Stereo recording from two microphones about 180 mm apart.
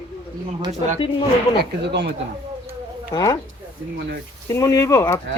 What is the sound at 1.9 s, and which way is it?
Speech, 75° right (ahead or behind).